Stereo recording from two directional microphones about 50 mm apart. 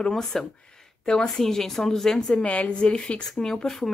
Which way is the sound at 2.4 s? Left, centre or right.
Left.